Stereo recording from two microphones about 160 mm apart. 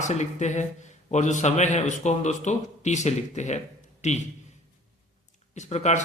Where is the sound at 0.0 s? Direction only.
45° left (ahead or behind).